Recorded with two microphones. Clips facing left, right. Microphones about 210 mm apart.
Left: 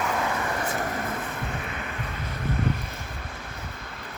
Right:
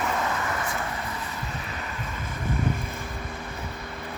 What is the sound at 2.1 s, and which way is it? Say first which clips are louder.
Wind: even; 50° right (ahead or behind).